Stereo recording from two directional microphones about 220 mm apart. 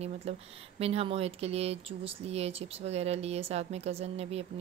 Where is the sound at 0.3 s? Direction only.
30° right (ahead or behind).